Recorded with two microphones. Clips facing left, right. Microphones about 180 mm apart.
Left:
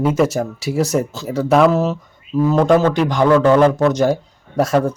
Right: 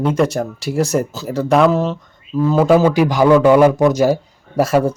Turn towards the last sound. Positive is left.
turn(degrees=-5)  # may be behind; listen again after turning